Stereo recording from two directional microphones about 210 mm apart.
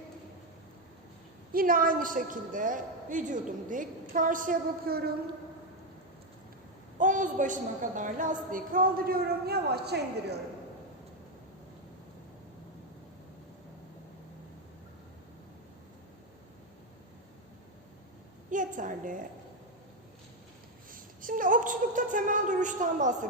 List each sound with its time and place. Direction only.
1.5 s a woman's voice: 40° right (ahead or behind)
7.0 s a woman's voice: 35° right (ahead or behind)
18.5 s a woman's voice: 40° right (ahead or behind)
20.9 s a sound: 40° right (ahead or behind)